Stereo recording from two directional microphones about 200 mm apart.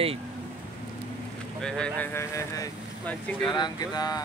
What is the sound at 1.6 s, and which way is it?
Speech, 5° left (ahead or behind).